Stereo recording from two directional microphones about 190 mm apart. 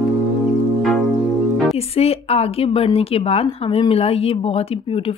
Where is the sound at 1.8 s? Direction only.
30° left (ahead or behind).